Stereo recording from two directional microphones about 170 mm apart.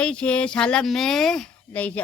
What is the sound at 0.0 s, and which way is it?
A woman's voice, 5° left (ahead or behind).